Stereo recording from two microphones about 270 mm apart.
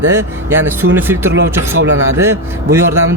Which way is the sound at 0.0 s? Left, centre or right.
Centre.